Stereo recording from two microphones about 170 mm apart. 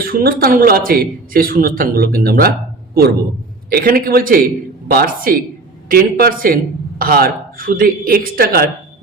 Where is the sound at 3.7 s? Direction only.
60° right (ahead or behind).